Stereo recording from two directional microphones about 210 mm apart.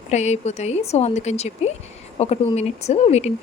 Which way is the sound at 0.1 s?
35° left (ahead or behind).